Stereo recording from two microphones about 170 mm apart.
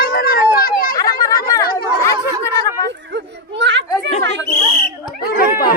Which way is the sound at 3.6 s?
90° right.